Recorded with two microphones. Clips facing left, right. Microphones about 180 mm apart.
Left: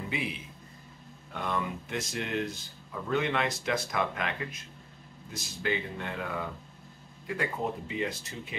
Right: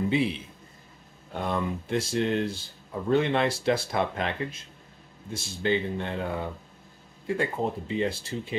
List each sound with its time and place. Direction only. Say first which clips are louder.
0.1 s a man's voice: right 9 dB; 30° right (ahead or behind)